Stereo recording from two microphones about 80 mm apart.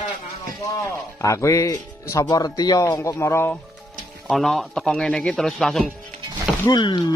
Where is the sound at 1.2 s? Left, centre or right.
Left.